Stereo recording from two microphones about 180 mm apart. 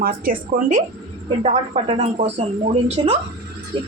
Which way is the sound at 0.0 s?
50° right (ahead or behind).